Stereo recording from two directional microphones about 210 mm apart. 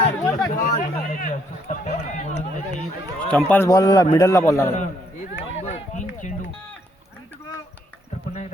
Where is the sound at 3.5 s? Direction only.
15° left (ahead or behind).